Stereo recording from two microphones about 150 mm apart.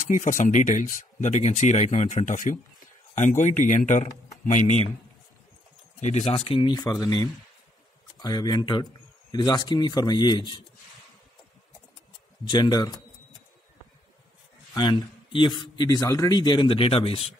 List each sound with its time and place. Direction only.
0.0 s speech: 60° left (ahead or behind)
5.9 s speech: 50° left (ahead or behind)
6.2 s a man's voice: 35° left (ahead or behind)
12.4 s a man's voice: 30° left (ahead or behind)
14.7 s a man's voice: 30° left (ahead or behind)